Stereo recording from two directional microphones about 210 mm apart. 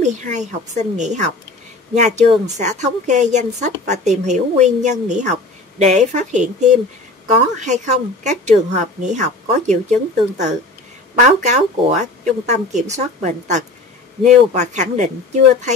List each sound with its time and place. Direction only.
0.0 s speech: 35° right (ahead or behind)